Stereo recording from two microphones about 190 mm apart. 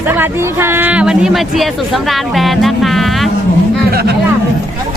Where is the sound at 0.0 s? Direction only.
10° right (ahead or behind).